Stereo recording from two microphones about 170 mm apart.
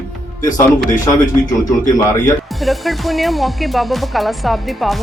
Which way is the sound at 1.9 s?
15° left (ahead or behind).